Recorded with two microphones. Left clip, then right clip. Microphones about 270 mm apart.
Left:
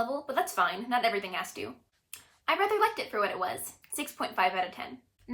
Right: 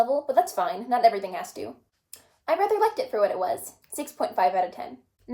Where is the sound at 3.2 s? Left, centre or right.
Left.